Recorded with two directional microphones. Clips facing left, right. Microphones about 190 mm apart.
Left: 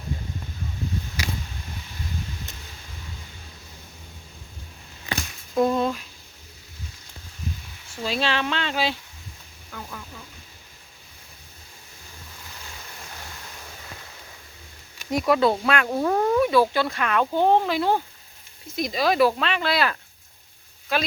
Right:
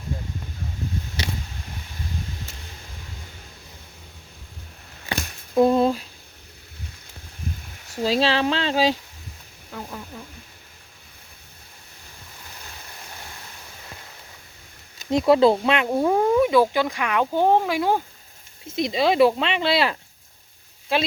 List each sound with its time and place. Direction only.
5.5 s a sound: 30° right (ahead or behind)
7.9 s speech: 35° right (ahead or behind)
14.9 s speech: 25° right (ahead or behind)
18.7 s speech: 25° right (ahead or behind)